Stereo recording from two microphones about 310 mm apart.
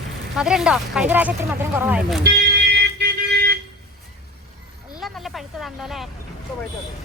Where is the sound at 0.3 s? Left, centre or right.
Centre.